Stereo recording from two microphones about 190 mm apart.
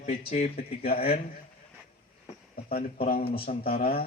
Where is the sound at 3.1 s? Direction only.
50° left (ahead or behind).